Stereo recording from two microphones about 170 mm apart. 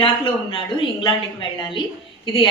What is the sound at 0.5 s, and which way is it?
A woman's voice, 30° left (ahead or behind).